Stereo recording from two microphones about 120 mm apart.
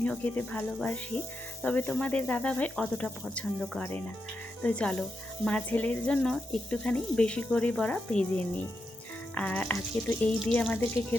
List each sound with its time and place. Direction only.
0.0 s speech: 15° left (ahead or behind)
9.3 s speech: 10° left (ahead or behind)